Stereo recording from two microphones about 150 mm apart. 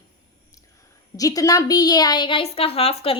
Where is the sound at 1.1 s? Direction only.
25° left (ahead or behind).